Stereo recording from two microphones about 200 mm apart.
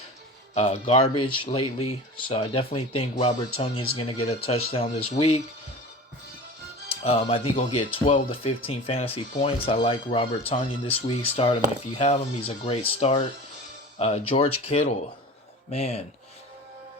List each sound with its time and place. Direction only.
0.5 s speech: 30° left (ahead or behind)
7.0 s speech: 30° left (ahead or behind)